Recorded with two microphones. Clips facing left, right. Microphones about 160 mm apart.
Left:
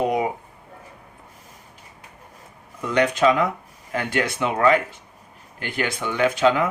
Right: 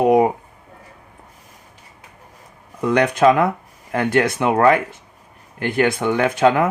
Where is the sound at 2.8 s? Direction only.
60° right (ahead or behind).